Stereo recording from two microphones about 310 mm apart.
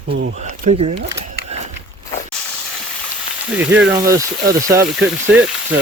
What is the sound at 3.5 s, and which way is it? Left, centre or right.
Speech, centre.